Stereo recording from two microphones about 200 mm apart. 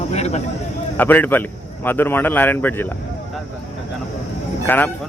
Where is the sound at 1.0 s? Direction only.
10° left (ahead or behind).